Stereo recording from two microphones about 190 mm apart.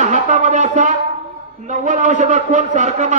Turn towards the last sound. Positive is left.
turn(degrees=-40)  # may be behind; listen again after turning